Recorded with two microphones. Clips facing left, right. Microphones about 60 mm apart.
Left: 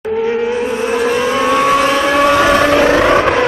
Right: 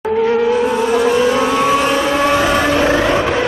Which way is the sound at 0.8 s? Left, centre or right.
Left.